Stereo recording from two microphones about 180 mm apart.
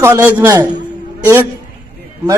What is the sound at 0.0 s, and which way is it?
Speech, 15° right (ahead or behind).